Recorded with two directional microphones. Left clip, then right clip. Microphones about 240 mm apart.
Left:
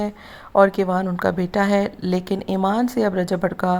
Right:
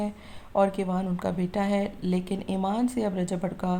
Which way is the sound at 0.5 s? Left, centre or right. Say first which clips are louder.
Left 9 dB; left.